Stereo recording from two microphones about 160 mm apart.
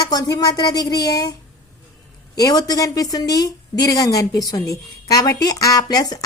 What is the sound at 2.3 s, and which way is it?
A woman's voice, 20° left (ahead or behind).